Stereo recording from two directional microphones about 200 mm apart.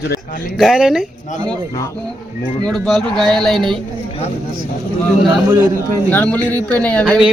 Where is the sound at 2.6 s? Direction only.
Centre (ahead or behind).